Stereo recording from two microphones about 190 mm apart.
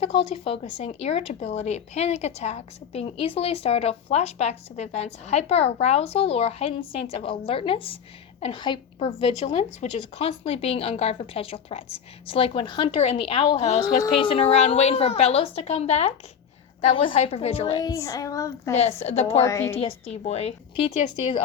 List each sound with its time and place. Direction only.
0.0 s a woman's voice: 30° left (ahead or behind)
18.7 s speech: 35° left (ahead or behind)
19.4 s a woman's voice: 15° left (ahead or behind)
19.7 s speech: 30° left (ahead or behind)